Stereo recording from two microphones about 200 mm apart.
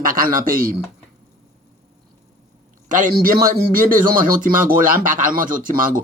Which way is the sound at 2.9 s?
40° right (ahead or behind).